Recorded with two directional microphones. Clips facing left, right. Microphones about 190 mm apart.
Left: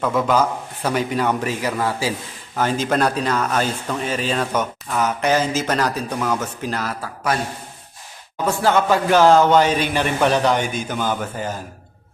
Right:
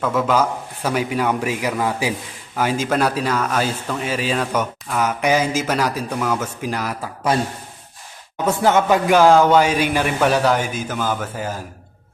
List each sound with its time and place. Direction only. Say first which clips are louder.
0.0 s speech: even; centre (ahead or behind)
8.4 s a man's voice: right 1 dB; 20° right (ahead or behind)